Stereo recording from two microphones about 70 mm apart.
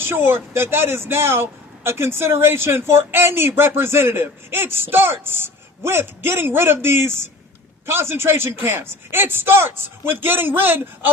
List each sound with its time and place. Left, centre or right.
0.0 s a man's voice: right